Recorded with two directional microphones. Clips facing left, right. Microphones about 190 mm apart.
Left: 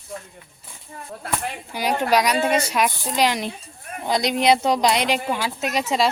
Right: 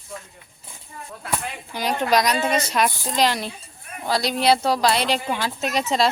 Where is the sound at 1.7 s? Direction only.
10° left (ahead or behind).